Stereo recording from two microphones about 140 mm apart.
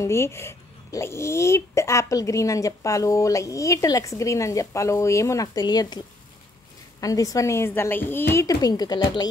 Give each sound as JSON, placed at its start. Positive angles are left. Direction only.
{"t": 0.0, "sound": "speech", "side_deg": 20}
{"t": 7.0, "sound": "speech", "side_deg": 25}